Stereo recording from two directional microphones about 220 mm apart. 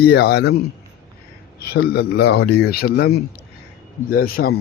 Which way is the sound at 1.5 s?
45° left (ahead or behind).